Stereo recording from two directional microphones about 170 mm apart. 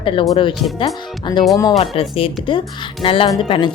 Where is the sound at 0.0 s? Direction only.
30° left (ahead or behind).